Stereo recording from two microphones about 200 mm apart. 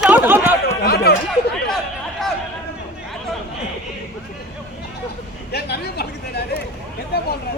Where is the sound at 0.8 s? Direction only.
50° left (ahead or behind).